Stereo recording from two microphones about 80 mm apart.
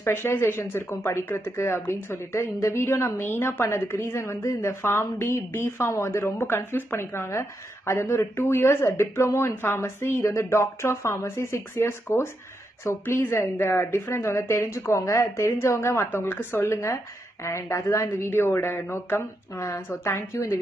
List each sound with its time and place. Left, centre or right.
0.0 s speech: left